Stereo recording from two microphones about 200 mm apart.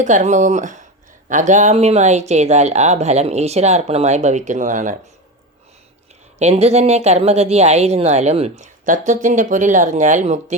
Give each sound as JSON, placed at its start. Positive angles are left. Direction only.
{"t": 0.0, "sound": "speech", "side_deg": -40}
{"t": 6.4, "sound": "speech", "side_deg": -30}